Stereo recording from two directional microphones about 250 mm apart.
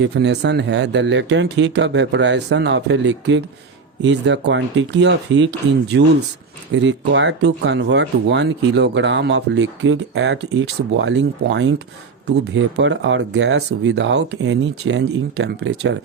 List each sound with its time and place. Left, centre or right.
0.0 s speech: right